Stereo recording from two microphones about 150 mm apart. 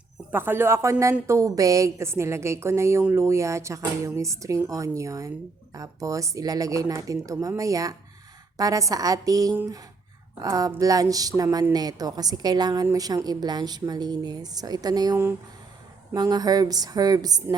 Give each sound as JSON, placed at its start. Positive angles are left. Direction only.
{"t": 0.3, "sound": "a woman's voice", "side_deg": -15}